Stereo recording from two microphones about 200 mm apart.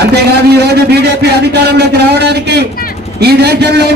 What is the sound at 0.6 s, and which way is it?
A man's voice, 55° right (ahead or behind).